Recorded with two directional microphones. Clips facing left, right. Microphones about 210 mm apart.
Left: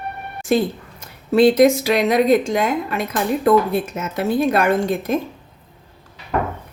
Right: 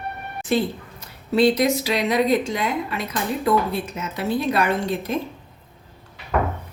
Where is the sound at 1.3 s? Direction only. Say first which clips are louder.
Left 5 dB; 50° left (ahead or behind).